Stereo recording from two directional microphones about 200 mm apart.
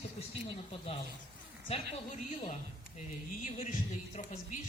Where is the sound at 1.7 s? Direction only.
30° left (ahead or behind).